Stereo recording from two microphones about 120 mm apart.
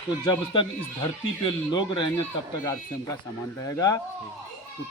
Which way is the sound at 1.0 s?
40° left (ahead or behind).